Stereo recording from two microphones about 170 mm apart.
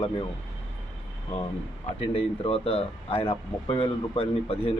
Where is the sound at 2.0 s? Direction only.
35° left (ahead or behind).